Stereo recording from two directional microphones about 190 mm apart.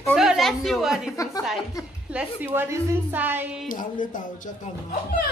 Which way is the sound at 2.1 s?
10° right (ahead or behind).